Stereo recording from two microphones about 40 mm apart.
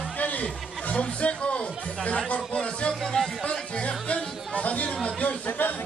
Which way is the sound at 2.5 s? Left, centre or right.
Left.